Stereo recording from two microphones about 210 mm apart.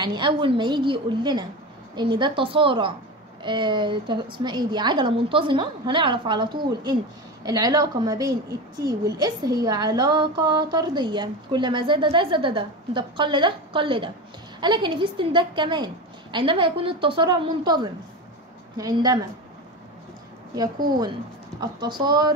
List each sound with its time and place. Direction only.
0.0 s a woman's voice: 20° right (ahead or behind)
20.5 s a woman's voice: 20° right (ahead or behind)